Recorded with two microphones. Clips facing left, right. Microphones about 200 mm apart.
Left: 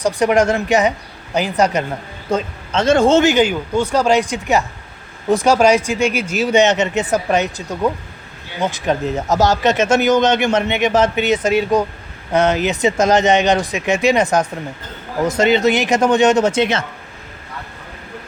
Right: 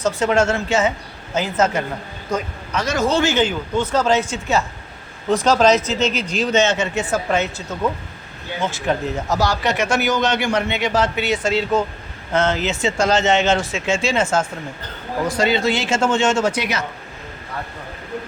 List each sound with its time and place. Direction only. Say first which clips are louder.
0.0 s speech: left 3 dB; 15° left (ahead or behind)
2.3 s a man's voice: left 4 dB; 30° left (ahead or behind)